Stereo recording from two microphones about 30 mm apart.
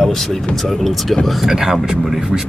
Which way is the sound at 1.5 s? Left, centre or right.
Centre.